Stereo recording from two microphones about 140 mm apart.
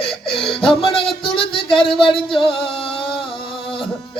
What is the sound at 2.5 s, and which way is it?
Music, 40° left (ahead or behind).